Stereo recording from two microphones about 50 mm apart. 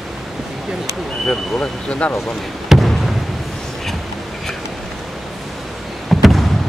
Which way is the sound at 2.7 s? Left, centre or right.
Centre.